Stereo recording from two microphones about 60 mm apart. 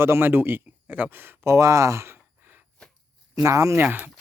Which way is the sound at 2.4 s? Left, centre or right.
Right.